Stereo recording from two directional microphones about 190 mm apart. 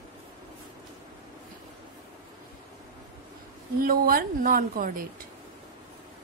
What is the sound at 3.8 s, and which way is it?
A woman's voice, 50° right (ahead or behind).